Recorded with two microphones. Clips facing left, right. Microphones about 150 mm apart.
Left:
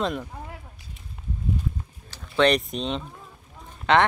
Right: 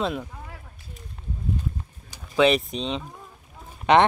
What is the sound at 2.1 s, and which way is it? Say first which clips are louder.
Speech: right 1 dB; 10° right (ahead or behind).